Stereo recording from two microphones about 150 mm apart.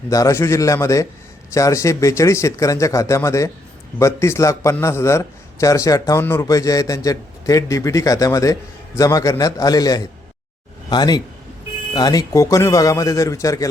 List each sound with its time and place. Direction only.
0.1 s a man's voice: 20° left (ahead or behind)